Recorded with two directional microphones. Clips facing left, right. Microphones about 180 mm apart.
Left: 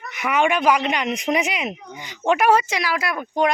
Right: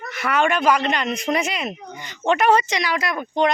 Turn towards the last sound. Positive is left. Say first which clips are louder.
# right 1 dB
turn(degrees=10)  # may be behind; listen again after turning